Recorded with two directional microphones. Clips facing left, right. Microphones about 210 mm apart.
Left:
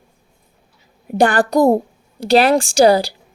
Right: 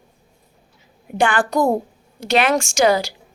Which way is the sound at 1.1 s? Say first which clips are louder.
Left 4 dB; 40° left (ahead or behind).